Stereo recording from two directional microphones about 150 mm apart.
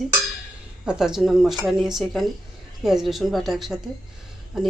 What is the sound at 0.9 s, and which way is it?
Speech, 5° right (ahead or behind).